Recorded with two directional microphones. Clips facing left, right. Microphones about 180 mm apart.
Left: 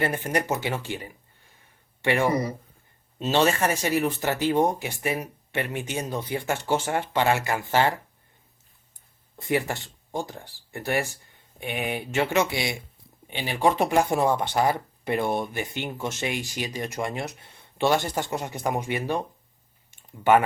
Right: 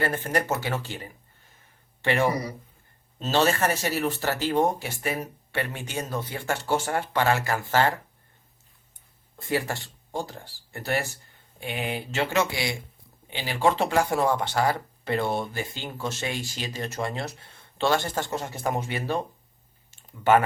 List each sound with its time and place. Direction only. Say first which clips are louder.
0.0 s speech: even; 15° left (ahead or behind)
3.7 s speech: left 2 dB; 15° left (ahead or behind)
9.4 s speech: left 2 dB; 20° left (ahead or behind)
19.9 s a sound: left 1 dB; 15° left (ahead or behind)